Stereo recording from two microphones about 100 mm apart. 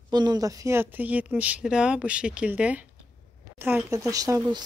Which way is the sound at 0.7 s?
15° right (ahead or behind).